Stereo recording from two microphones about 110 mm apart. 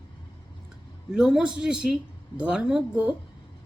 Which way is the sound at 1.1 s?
5° right (ahead or behind).